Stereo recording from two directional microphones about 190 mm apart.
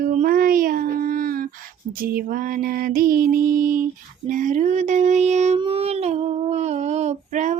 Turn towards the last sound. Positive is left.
turn(degrees=-40)  # may be behind; listen again after turning